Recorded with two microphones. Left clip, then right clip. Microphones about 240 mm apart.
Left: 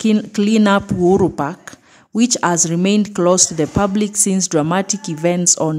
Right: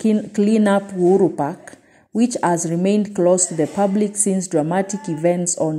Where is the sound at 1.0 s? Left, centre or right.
Left.